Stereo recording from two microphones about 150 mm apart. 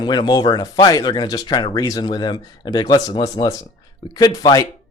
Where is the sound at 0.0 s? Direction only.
30° left (ahead or behind).